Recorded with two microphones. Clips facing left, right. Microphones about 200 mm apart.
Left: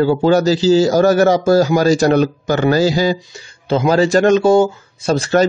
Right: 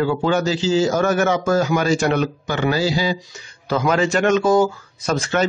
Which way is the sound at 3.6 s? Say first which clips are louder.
Left 5 dB; 30° left (ahead or behind).